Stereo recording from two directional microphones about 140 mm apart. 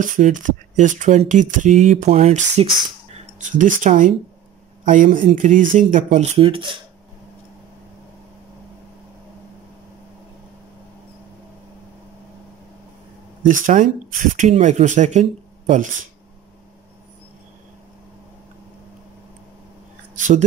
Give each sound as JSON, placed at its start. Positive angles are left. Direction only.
{"t": 0.0, "sound": "speech", "side_deg": -65}
{"t": 3.5, "sound": "speech", "side_deg": -65}
{"t": 13.4, "sound": "speech", "side_deg": -70}
{"t": 20.2, "sound": "speech", "side_deg": -60}